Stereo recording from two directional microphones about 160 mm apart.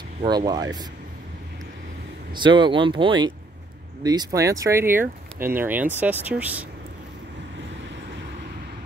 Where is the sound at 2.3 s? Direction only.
30° right (ahead or behind); by 6.7 s 10° right (ahead or behind).